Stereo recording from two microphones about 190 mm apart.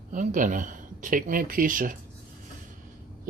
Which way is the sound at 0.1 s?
45° right (ahead or behind).